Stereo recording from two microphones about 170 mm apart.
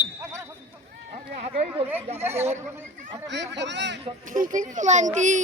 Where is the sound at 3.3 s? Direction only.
90° right.